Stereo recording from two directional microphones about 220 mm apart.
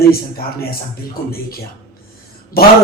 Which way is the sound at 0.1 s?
45° left (ahead or behind).